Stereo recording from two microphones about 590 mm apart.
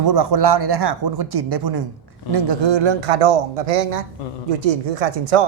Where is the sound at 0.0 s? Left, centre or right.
Right.